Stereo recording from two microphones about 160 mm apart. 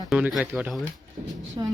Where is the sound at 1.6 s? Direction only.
25° right (ahead or behind).